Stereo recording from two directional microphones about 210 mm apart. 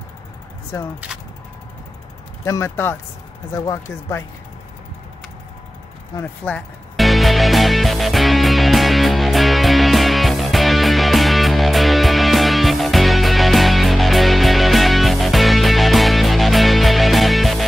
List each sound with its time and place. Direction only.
2.4 s speech: 15° left (ahead or behind)
6.1 s music: 5° left (ahead or behind)